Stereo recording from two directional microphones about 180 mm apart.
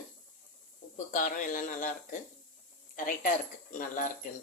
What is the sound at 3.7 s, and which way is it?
Speech, 45° left (ahead or behind).